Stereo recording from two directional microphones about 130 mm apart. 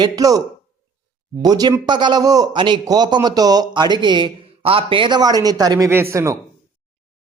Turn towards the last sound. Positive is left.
turn(degrees=-20)  # may be behind; listen again after turning